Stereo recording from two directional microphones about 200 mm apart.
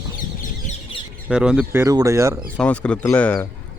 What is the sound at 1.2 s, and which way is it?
Speech, 5° right (ahead or behind).